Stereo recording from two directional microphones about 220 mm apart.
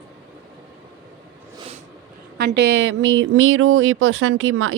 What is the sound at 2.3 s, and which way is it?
Speech, 50° right (ahead or behind).